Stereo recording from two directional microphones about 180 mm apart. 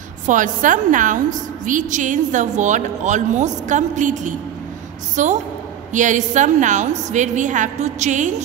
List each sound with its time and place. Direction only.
0.3 s a woman's voice: 45° right (ahead or behind)